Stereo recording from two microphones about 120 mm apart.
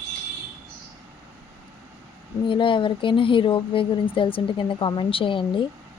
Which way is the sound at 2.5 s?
45° left (ahead or behind).